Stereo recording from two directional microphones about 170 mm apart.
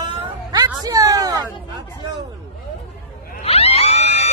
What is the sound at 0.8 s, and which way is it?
Speech, 20° right (ahead or behind).